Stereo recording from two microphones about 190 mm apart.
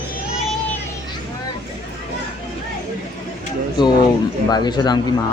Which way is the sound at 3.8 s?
20° left (ahead or behind).